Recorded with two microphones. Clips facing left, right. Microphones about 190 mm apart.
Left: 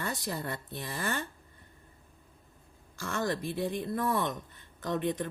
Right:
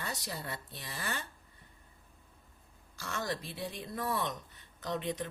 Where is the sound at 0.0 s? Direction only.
50° left (ahead or behind).